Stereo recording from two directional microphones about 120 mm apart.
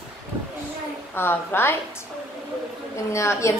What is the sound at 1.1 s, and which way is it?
Speech, 20° left (ahead or behind).